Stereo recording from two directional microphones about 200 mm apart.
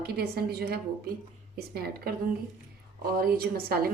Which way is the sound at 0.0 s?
50° right (ahead or behind).